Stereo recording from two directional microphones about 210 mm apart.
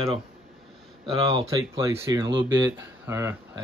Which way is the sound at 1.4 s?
15° right (ahead or behind).